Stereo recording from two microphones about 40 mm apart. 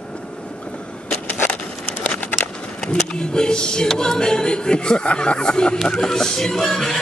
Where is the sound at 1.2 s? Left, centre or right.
Left.